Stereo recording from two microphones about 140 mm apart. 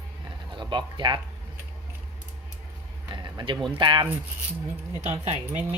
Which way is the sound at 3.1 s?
30° right (ahead or behind).